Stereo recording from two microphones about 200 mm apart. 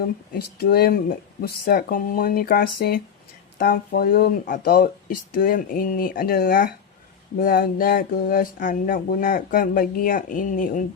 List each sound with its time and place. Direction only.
0.3 s speech: 50° left (ahead or behind)